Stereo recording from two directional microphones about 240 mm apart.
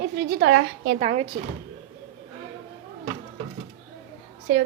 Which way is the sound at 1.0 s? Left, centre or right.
Right.